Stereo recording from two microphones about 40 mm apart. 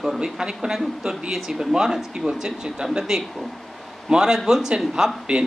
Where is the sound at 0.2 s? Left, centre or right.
Centre.